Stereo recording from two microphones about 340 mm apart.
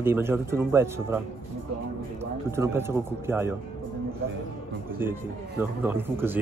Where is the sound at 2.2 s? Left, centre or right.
Centre.